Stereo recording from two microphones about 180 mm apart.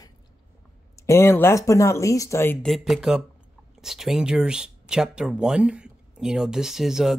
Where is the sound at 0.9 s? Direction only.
15° left (ahead or behind).